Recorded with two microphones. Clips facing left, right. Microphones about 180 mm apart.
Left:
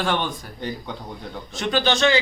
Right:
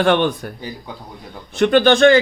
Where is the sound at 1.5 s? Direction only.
55° right (ahead or behind).